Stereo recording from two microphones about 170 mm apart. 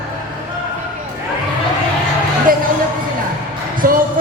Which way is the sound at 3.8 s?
55° right (ahead or behind).